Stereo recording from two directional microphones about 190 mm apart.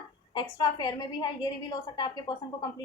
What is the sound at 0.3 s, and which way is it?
A woman's voice, 20° left (ahead or behind).